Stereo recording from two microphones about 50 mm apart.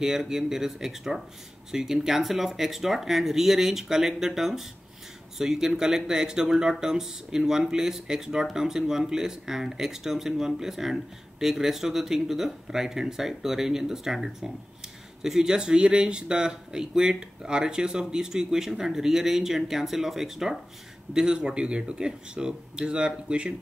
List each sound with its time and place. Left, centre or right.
0.0 s speech: centre